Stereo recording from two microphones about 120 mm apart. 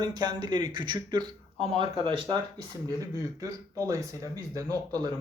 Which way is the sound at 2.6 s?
30° right (ahead or behind).